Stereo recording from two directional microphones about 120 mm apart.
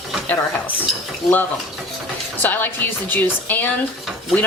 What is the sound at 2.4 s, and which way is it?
Speech, 15° left (ahead or behind).